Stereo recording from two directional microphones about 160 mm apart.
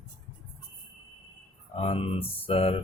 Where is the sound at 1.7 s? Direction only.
35° left (ahead or behind).